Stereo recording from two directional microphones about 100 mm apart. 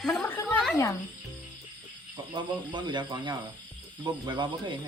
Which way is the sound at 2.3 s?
50° right (ahead or behind).